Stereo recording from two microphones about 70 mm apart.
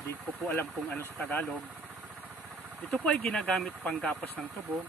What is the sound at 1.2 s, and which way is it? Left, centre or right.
Speech, left.